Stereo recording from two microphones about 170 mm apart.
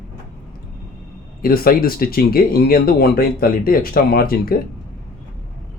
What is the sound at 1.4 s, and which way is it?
Speech, 60° left (ahead or behind).